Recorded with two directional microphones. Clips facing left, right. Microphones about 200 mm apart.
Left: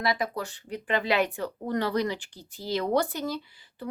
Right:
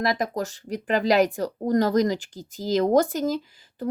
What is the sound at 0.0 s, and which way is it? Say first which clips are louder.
Speech: right 4 dB; 45° right (ahead or behind).